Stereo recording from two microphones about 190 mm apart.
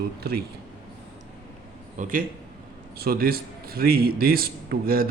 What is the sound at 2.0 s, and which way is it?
A man's voice, 45° right (ahead or behind).